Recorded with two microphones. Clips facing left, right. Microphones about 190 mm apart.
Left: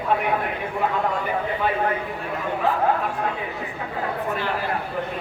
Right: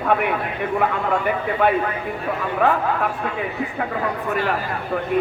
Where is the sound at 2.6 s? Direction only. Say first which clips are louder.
Right 6 dB; 60° right (ahead or behind).